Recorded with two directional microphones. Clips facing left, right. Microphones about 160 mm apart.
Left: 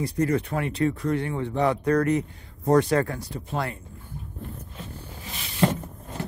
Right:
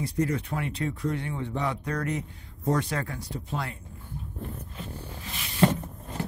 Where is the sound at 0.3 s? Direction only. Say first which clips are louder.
Left 5 dB; 60° left (ahead or behind).